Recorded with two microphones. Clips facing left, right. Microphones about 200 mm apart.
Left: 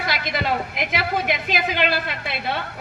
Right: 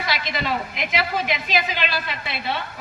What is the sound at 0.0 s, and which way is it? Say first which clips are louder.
Speech: left 1 dB; 55° left (ahead or behind).